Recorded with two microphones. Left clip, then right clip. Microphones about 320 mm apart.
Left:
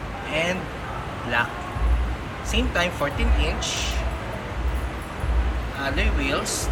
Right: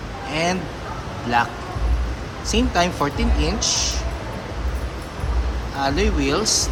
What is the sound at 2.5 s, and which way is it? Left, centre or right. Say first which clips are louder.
Speech: right 4 dB; centre.